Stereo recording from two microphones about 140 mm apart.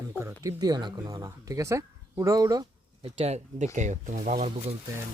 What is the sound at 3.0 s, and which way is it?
Speech, 50° right (ahead or behind).